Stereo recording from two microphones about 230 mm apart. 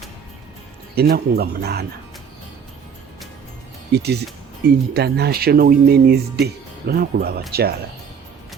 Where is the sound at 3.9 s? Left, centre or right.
Right.